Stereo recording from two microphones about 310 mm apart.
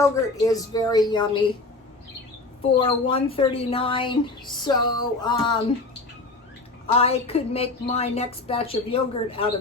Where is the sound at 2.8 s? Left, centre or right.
Centre.